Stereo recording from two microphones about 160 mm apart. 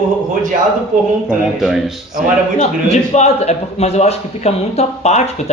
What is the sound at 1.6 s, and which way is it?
Speech, centre (ahead or behind).